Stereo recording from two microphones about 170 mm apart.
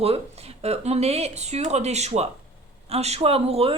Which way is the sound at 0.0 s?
35° right (ahead or behind).